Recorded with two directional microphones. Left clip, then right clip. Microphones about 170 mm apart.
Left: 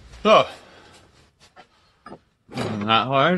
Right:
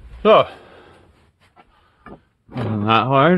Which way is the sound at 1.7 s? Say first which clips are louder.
Right 3 dB; 35° right (ahead or behind).